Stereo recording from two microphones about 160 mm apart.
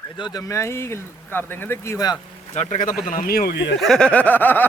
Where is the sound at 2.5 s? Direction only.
45° left (ahead or behind); by 3.7 s 85° left.